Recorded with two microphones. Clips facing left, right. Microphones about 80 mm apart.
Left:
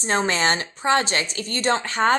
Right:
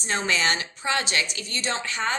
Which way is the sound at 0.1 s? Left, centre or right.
Left.